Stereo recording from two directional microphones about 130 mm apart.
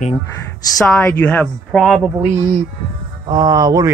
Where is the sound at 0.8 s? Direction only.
15° left (ahead or behind).